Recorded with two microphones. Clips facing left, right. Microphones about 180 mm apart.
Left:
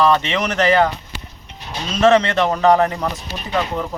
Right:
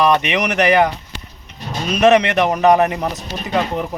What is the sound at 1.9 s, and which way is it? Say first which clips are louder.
A man's voice: right 1 dB; 15° right (ahead or behind).